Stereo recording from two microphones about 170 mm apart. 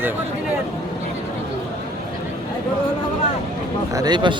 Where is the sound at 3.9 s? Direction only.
25° right (ahead or behind).